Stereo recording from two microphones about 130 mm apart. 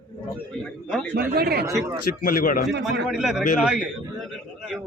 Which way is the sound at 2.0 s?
90° left.